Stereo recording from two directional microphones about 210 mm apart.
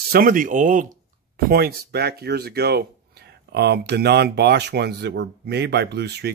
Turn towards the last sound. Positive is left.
turn(degrees=-50)  # may be behind; listen again after turning